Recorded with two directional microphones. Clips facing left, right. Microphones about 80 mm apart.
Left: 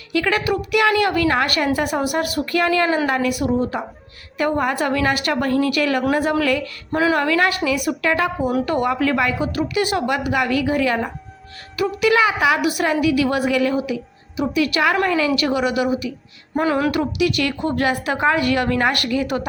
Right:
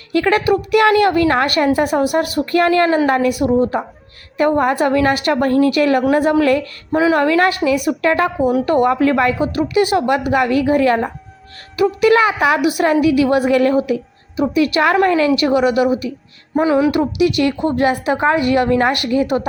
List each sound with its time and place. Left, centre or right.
0.1 s a woman's voice: right
6.9 s music: centre
7.2 s a woman's voice: right
13.5 s a woman's voice: right
16.6 s music: centre
16.9 s a woman's voice: right